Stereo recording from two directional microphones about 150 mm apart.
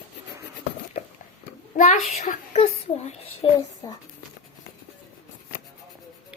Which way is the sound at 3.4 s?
35° left (ahead or behind).